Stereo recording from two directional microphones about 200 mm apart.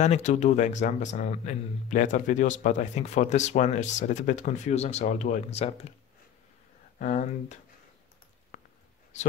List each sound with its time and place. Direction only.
0.0 s a man's voice: 35° left (ahead or behind)
7.0 s a man's voice: 40° left (ahead or behind)
8.5 s a sound: 40° left (ahead or behind)